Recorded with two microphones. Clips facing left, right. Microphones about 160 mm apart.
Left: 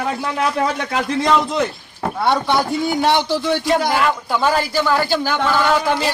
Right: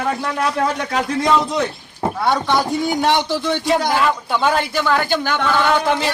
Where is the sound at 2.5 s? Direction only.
5° left (ahead or behind).